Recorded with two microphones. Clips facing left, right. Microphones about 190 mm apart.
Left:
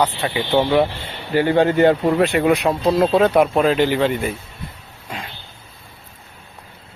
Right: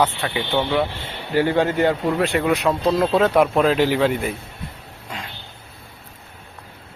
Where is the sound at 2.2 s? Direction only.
15° left (ahead or behind).